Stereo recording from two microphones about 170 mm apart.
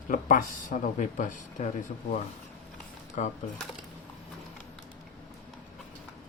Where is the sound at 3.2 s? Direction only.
45° left (ahead or behind).